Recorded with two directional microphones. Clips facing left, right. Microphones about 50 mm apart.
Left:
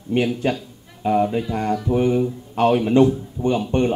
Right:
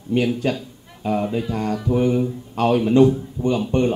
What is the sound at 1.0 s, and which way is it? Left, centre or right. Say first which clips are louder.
A man's voice: left 3 dB; left.